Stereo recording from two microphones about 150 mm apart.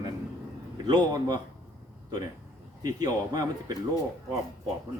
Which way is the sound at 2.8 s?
25° right (ahead or behind).